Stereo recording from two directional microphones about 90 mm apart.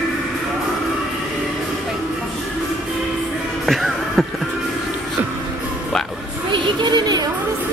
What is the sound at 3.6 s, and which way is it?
Music, centre (ahead or behind).